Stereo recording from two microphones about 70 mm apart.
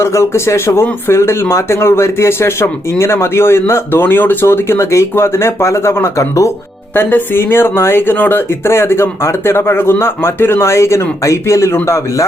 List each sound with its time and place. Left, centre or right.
0.0 s speech: left